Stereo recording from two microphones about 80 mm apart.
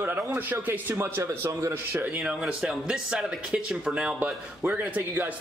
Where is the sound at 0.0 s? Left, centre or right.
Right.